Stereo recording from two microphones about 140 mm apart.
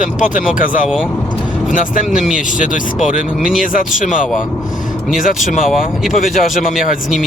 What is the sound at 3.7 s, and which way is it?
Speech, 70° left (ahead or behind).